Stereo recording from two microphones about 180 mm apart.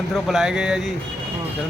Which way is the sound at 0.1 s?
Centre (ahead or behind).